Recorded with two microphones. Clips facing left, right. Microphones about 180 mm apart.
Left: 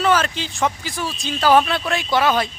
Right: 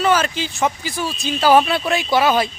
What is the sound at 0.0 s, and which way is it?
A man's voice, 5° right (ahead or behind).